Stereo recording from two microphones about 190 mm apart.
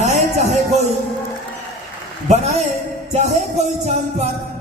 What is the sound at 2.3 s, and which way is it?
Speech, 35° right (ahead or behind).